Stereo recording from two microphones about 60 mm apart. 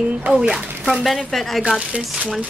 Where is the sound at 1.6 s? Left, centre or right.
Centre.